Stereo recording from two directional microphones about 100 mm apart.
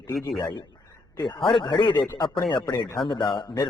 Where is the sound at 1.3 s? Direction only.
55° left (ahead or behind).